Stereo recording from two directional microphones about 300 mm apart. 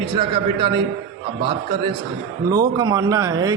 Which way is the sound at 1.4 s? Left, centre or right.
Centre.